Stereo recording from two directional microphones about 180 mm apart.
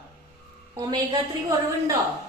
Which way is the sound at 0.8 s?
25° right (ahead or behind).